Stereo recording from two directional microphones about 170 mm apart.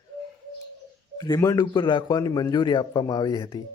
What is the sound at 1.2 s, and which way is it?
A man's voice, 20° left (ahead or behind).